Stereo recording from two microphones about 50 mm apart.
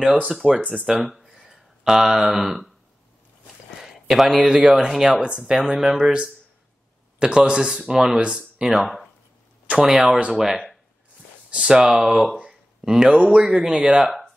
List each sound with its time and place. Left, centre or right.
0.3 s speech: centre
3.8 s speech: centre
8.2 s speech: centre
10.0 s speech: right
10.3 s speech: centre
12.4 s a sound: centre
13.3 s speech: centre